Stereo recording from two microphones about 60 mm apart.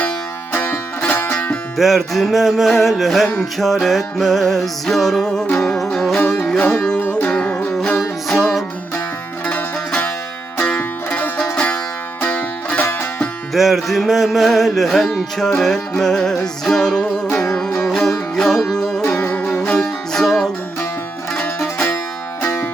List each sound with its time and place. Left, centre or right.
0.6 s music: left
1.7 s music: centre
7.0 s music: left
7.3 s music: centre
8.3 s music: centre
10.6 s music: left
12.8 s music: left
13.5 s music: centre
19.2 s music: left
19.8 s music: centre